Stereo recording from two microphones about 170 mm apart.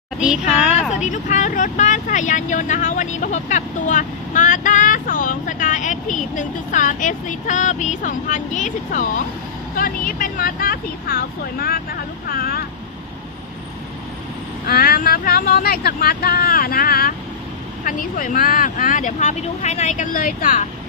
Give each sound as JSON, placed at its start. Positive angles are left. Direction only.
{"t": 0.7, "sound": "speech", "side_deg": 45}
{"t": 14.7, "sound": "speech", "side_deg": 60}